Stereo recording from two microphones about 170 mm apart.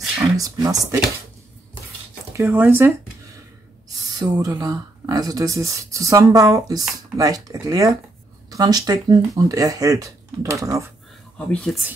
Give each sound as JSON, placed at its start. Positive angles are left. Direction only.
{"t": 0.2, "sound": "speech", "side_deg": -20}
{"t": 2.3, "sound": "speech", "side_deg": -15}
{"t": 4.2, "sound": "speech", "side_deg": -20}
{"t": 11.3, "sound": "speech", "side_deg": 5}